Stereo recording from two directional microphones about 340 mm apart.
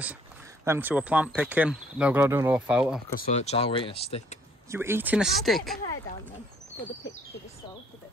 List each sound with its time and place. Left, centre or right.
0.7 s speech: centre
3.2 s speech: centre
4.6 s speech: centre